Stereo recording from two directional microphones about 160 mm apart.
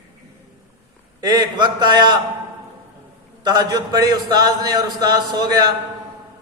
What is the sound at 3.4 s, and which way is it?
Speech, 25° right (ahead or behind).